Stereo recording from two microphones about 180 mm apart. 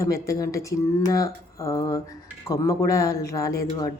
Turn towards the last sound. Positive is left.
turn(degrees=20)  # may be behind; listen again after turning